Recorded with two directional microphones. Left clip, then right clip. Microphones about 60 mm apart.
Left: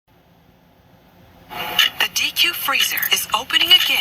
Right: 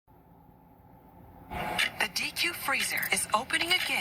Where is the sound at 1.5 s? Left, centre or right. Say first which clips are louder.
Left 11 dB; right.